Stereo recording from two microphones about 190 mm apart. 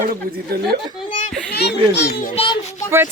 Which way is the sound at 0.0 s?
45° right (ahead or behind).